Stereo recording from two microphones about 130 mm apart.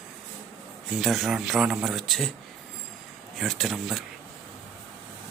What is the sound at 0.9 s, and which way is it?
Speech, centre (ahead or behind).